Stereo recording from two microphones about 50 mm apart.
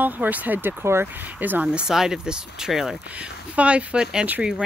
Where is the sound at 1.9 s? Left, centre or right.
Centre.